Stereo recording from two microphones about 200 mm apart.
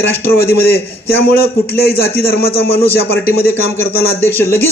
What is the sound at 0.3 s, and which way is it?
A man's voice, 50° left (ahead or behind).